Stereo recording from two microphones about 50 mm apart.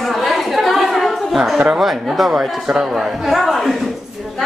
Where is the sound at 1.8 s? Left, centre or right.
Centre.